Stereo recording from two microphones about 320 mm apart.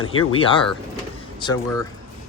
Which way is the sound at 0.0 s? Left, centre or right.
Left.